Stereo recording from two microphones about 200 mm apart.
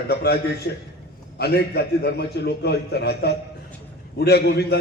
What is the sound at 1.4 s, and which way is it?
A man's voice, 55° left (ahead or behind).